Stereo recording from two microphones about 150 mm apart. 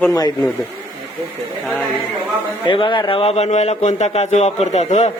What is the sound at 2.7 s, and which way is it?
A man's voice, 35° left (ahead or behind).